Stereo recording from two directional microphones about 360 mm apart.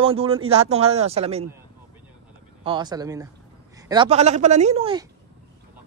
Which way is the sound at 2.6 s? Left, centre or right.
Centre.